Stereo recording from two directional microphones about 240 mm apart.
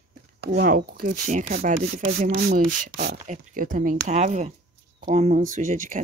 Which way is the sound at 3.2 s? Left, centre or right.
Right.